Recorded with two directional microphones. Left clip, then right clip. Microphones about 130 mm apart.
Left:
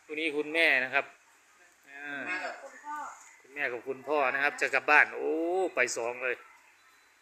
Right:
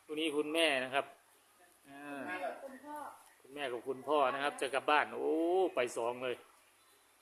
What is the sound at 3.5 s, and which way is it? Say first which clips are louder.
Speech: left 7 dB; 20° right (ahead or behind).